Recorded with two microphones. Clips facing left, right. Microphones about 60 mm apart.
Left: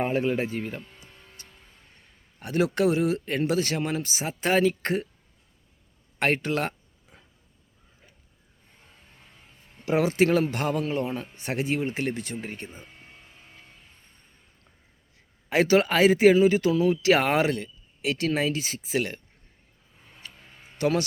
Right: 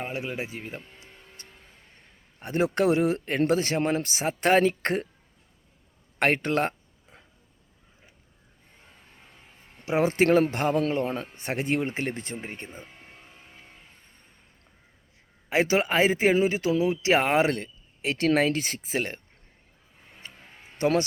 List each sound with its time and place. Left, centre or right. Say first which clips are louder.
0.1 s speech: left 7 dB; centre
1.4 s music: right 1 dB; right
2.4 s speech: even; right
2.8 s speech: right 1 dB; right
6.1 s a sound: right 1 dB; right
10.0 s speech: right 2 dB; right
11.3 s speech: even; right
15.4 s speech: left 3 dB; right
17.5 s a sound: even; right
18.3 s speech: right 6 dB; right
20.2 s music: even; right